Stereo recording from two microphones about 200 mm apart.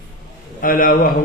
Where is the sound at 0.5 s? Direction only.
45° left (ahead or behind).